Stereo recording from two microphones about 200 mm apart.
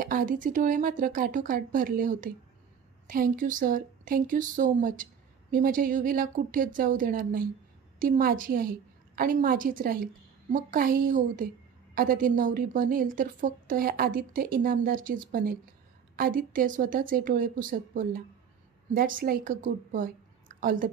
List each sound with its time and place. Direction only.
0.0 s a woman's voice: 40° right (ahead or behind)